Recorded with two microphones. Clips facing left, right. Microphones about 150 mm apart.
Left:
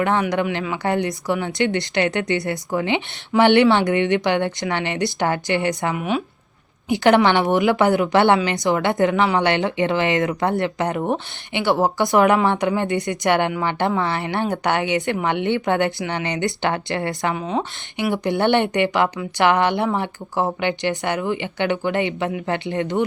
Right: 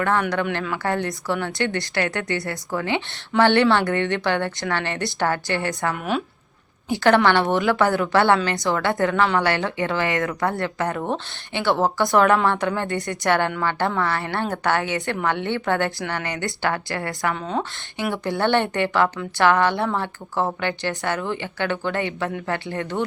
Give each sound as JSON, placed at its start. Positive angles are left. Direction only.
{"t": 0.0, "sound": "a woman's voice", "side_deg": 15}
{"t": 6.0, "sound": "speech", "side_deg": 0}
{"t": 6.8, "sound": "a woman's voice", "side_deg": 15}